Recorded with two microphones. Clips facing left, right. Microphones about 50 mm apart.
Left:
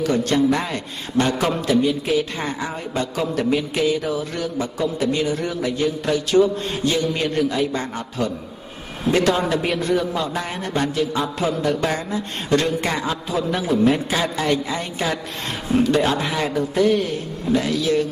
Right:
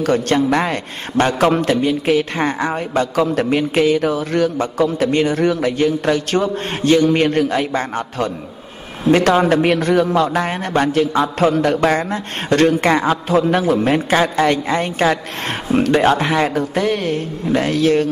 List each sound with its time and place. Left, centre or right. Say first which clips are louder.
0.0 s a man's voice: right 3 dB; right